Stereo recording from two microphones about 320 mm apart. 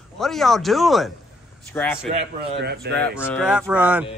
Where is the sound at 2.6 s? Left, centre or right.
Right.